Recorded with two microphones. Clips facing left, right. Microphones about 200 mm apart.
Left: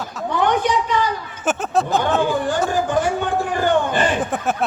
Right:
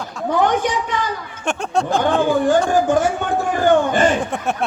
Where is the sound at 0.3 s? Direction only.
45° right (ahead or behind).